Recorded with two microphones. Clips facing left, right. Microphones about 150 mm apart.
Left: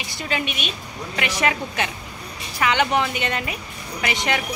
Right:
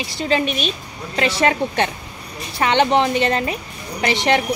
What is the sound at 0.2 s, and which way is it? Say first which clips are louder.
A woman's voice: right 7 dB; 35° right (ahead or behind).